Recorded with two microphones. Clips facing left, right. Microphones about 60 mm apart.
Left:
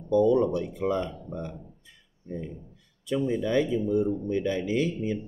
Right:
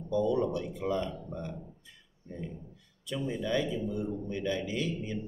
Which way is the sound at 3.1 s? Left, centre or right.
Left.